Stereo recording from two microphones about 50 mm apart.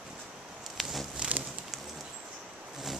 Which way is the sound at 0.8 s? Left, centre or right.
Centre.